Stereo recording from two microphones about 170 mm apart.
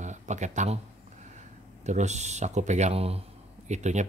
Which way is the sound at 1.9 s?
45° right (ahead or behind).